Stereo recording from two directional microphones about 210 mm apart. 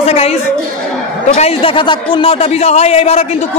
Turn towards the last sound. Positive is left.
turn(degrees=30)  # may be behind; listen again after turning